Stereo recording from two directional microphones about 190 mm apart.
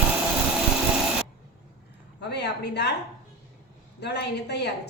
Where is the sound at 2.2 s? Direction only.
60° left (ahead or behind).